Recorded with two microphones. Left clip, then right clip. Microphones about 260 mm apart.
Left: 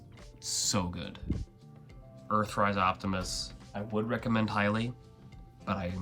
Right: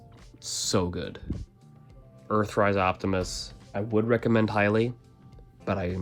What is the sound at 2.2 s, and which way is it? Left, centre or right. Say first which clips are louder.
Speech: right 4 dB; right.